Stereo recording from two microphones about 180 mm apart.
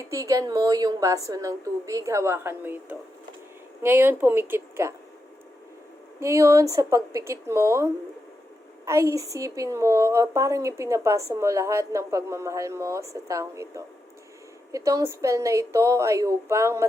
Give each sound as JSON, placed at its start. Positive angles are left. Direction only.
{"t": 0.0, "sound": "a woman's voice", "side_deg": -20}
{"t": 6.1, "sound": "a woman's voice", "side_deg": -15}